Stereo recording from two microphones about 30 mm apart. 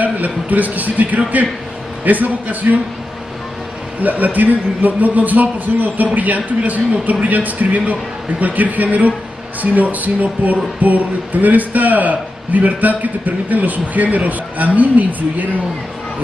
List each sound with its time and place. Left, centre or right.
0.0 s speech: right
4.0 s a man's voice: right